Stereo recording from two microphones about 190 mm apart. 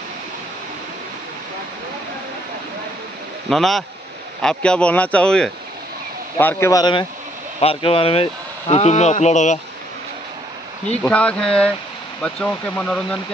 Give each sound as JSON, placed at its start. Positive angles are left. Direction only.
{"t": 3.4, "sound": "a man's voice", "side_deg": 0}
{"t": 11.0, "sound": "a man's voice", "side_deg": 5}